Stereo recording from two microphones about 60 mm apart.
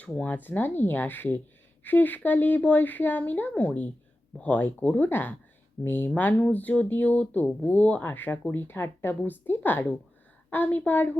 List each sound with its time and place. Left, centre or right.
0.2 s speech: left
6.1 s speech: left